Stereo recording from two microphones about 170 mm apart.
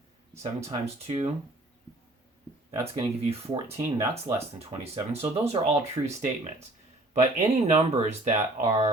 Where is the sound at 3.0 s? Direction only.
35° right (ahead or behind).